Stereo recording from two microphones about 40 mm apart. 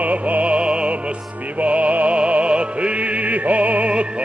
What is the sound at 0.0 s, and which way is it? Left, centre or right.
Music, right.